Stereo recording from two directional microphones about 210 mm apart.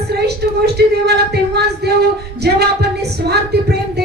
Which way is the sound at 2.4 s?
50° right (ahead or behind).